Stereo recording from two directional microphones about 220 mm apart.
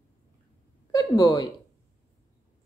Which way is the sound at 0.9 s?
15° left (ahead or behind).